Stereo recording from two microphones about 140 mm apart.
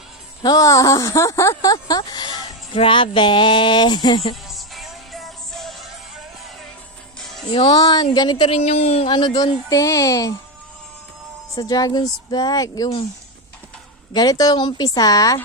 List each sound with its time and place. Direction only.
0.4 s speech: 25° left (ahead or behind)
4.4 s music: centre (ahead or behind)
7.2 s music: centre (ahead or behind)
7.5 s speech: 30° left (ahead or behind)
8.4 s speech: 50° left (ahead or behind)
9.0 s speech: 35° left (ahead or behind)
11.5 s speech: 30° left (ahead or behind)
14.1 s speech: 30° left (ahead or behind)